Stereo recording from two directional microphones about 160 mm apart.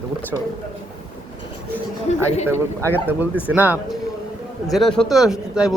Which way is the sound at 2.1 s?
45° left (ahead or behind).